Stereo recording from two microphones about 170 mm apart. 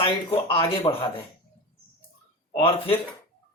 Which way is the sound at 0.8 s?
35° left (ahead or behind).